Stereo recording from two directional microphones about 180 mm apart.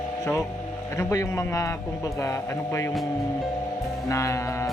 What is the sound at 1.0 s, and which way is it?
Speech, 15° left (ahead or behind).